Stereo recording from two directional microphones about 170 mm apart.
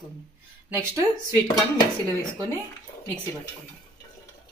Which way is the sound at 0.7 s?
20° right (ahead or behind).